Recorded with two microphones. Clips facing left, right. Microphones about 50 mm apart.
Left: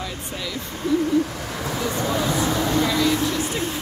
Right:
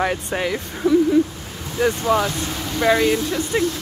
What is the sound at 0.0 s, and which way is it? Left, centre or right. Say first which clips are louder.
Speech: right 9 dB; right.